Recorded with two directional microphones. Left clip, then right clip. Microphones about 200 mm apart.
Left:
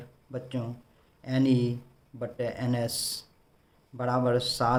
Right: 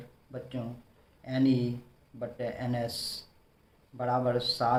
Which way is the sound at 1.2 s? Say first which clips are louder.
Left 2 dB; 55° left (ahead or behind).